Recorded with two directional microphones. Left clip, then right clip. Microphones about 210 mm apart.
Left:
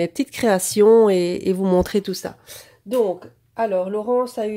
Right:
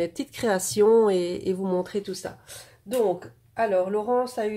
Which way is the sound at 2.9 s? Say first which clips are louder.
Left 4 dB; 35° left (ahead or behind).